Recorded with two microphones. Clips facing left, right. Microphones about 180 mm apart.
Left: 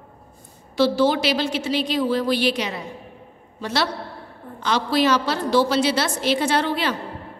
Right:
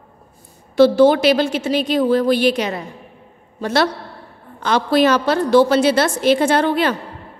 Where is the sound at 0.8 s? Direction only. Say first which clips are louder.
Right 7 dB; 50° right (ahead or behind).